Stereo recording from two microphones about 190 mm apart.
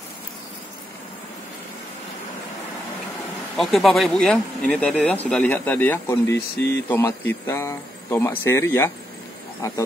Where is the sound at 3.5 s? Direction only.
Centre (ahead or behind).